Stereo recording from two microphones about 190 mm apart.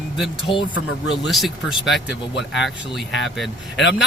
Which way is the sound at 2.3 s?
70° left (ahead or behind).